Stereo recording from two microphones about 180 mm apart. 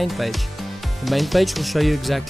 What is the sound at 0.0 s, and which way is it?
Speech, centre (ahead or behind).